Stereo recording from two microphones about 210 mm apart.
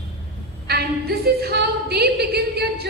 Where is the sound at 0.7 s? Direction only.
50° right (ahead or behind).